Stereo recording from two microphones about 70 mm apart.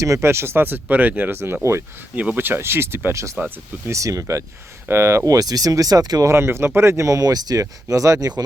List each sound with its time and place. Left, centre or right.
0.0 s speech: right
2.1 s speech: right
6.2 s speech: right
7.6 s speech: right